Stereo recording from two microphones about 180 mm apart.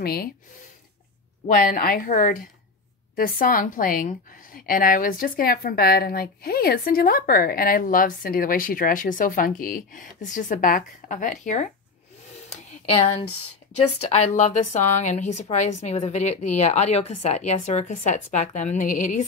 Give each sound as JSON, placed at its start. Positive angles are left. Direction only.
{"t": 0.0, "sound": "speech", "side_deg": 55}
{"t": 1.5, "sound": "a woman's voice", "side_deg": 50}
{"t": 12.4, "sound": "a sound", "side_deg": 35}
{"t": 14.0, "sound": "a woman's voice", "side_deg": 35}